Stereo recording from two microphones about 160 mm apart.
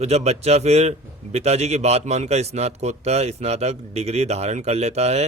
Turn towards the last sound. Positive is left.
turn(degrees=-45)  # may be behind; listen again after turning